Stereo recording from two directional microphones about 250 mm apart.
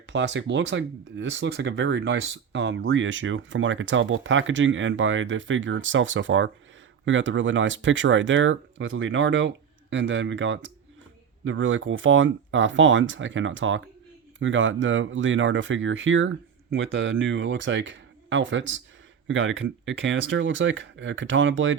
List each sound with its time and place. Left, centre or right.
0.1 s speech: right